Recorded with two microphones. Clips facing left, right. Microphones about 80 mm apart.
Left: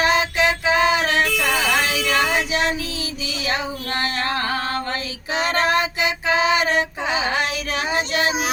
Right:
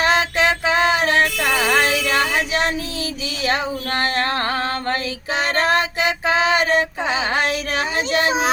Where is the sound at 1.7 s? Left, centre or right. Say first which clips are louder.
Right 3 dB; right.